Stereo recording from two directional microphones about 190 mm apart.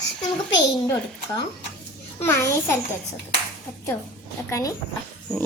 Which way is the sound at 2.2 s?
10° left (ahead or behind).